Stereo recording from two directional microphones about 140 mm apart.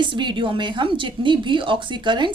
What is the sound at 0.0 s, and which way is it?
Speech, 35° right (ahead or behind).